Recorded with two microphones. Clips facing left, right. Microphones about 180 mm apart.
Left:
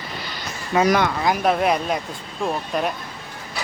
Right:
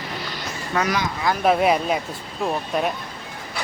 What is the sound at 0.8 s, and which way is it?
Speech, 55° left (ahead or behind).